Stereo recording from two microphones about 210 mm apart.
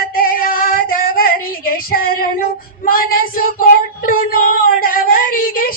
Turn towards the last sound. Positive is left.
turn(degrees=40)  # may be behind; listen again after turning